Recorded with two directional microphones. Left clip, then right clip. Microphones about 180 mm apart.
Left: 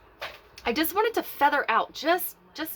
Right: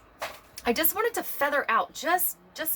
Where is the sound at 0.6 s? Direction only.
40° left (ahead or behind).